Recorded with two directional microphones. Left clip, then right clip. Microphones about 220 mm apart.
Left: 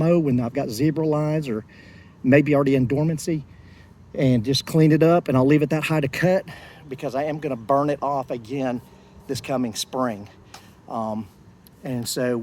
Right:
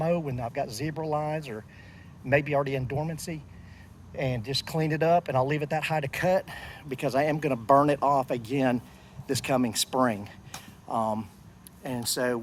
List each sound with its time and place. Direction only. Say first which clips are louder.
0.0 s speech: left 8 dB; 50° right (ahead or behind); by 12.4 s 25° right (ahead or behind)